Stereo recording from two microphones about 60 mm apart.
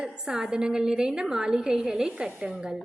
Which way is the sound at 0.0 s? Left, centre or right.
Centre.